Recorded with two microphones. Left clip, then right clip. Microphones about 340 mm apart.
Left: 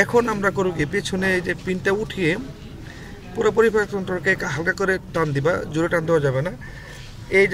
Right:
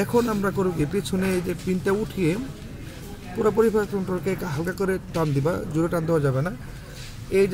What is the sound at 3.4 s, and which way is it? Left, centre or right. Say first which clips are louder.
Speech: left 3 dB; left.